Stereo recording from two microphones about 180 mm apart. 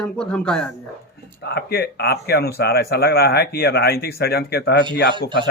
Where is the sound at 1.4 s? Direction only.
65° left (ahead or behind).